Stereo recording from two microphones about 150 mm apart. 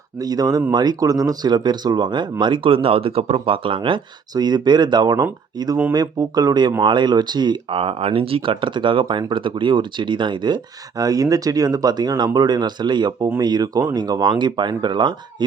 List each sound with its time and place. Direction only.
0.2 s speech: 25° right (ahead or behind)